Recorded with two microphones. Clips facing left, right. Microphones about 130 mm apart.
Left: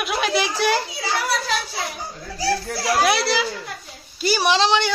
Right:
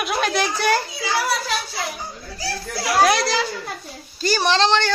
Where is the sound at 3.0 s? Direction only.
5° left (ahead or behind).